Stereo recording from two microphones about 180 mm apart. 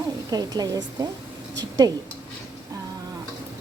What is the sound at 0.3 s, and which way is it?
Speech, 20° right (ahead or behind).